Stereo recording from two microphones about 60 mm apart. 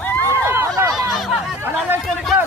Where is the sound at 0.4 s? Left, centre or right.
Right.